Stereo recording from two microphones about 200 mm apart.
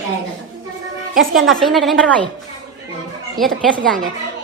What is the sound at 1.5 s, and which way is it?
Speech, centre (ahead or behind).